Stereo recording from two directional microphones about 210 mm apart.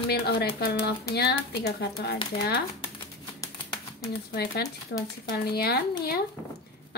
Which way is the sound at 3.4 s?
15° left (ahead or behind).